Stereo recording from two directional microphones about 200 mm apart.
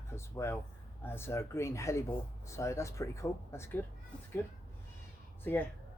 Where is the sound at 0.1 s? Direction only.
15° left (ahead or behind).